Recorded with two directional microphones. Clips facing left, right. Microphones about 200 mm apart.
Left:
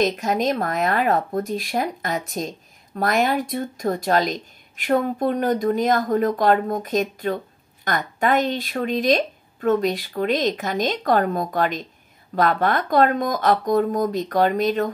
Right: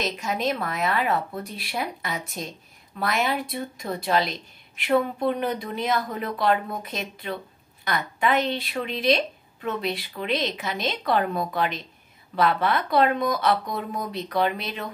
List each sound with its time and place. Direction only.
0.0 s speech: 45° left (ahead or behind)